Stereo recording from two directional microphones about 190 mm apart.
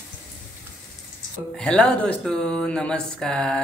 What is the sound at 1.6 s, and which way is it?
Speech, 5° left (ahead or behind).